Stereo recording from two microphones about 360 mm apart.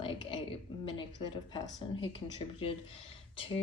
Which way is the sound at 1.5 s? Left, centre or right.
Centre.